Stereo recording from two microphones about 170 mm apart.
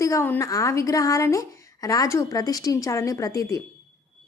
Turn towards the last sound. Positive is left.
turn(degrees=20)  # may be behind; listen again after turning